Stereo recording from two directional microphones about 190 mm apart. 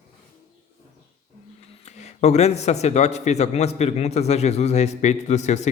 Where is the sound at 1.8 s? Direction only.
35° left (ahead or behind).